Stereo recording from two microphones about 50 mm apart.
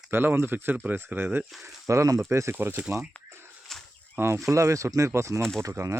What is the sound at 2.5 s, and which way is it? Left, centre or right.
Speech, right.